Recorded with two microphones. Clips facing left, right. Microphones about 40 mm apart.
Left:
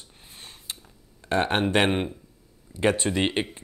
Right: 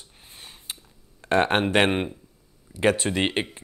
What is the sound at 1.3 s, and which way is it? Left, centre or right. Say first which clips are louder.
Speech: right 2 dB; right.